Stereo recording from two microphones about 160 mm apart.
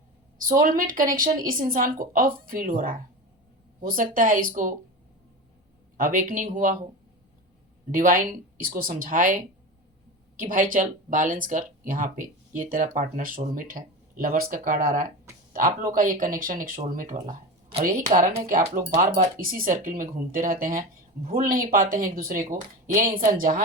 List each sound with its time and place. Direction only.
0.3 s speech: 60° right (ahead or behind)
6.0 s speech: 55° right (ahead or behind)
7.9 s speech: 60° right (ahead or behind)